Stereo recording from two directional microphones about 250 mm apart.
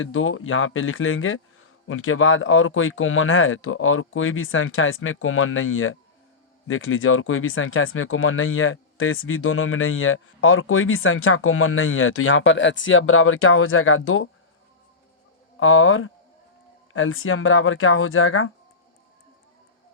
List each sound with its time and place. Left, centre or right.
0.0 s speech: left
15.6 s speech: left